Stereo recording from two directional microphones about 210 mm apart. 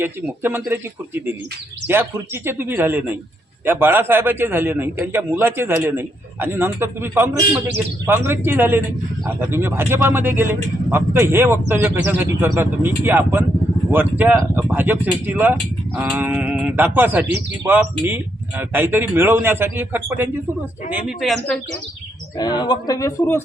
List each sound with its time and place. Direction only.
0.0 s a man's voice: 10° right (ahead or behind)
22.4 s a man's voice: 20° left (ahead or behind)